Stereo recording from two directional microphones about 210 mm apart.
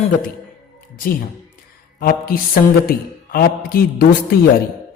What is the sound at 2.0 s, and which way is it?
A man's voice, 45° left (ahead or behind).